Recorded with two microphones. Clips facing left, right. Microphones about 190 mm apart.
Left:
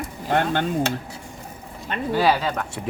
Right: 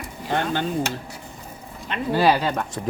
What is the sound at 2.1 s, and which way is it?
Speech, 10° right (ahead or behind).